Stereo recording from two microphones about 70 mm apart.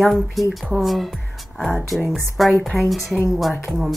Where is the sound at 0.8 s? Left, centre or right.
Centre.